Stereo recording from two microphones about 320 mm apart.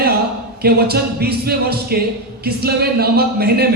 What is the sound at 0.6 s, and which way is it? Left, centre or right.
A man's voice, right.